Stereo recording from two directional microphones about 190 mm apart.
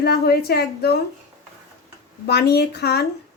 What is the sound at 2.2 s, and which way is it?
Speech, 55° left (ahead or behind).